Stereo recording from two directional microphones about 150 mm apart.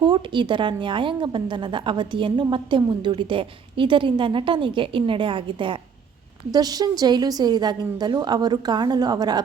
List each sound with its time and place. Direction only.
0.0 s a woman's voice: 30° right (ahead or behind)